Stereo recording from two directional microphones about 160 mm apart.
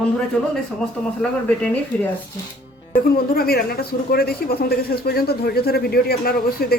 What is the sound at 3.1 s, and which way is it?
Speech, 65° left (ahead or behind).